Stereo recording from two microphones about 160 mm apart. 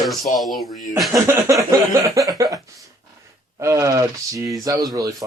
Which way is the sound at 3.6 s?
20° right (ahead or behind).